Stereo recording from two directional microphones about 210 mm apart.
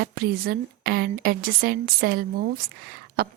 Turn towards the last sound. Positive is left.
turn(degrees=-45)  # may be behind; listen again after turning